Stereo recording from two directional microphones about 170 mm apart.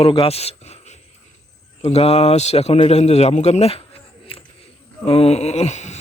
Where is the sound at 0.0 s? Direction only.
35° left (ahead or behind).